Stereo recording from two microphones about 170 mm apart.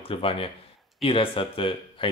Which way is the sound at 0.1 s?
35° left (ahead or behind).